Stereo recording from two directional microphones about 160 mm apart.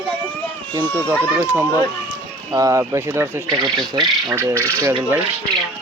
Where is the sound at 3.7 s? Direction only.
30° right (ahead or behind).